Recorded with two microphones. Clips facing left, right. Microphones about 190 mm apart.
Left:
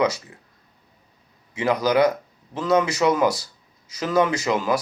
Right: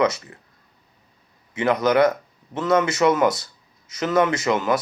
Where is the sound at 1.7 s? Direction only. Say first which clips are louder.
Right 1 dB; 25° right (ahead or behind).